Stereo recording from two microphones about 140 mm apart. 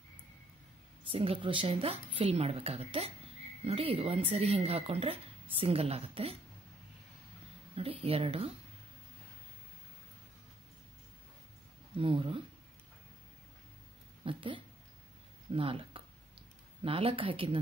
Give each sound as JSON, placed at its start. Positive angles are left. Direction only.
{"t": 1.0, "sound": "speech", "side_deg": -40}
{"t": 7.7, "sound": "speech", "side_deg": -45}
{"t": 12.0, "sound": "speech", "side_deg": -40}
{"t": 14.2, "sound": "a sound", "side_deg": -35}
{"t": 15.5, "sound": "speech", "side_deg": -40}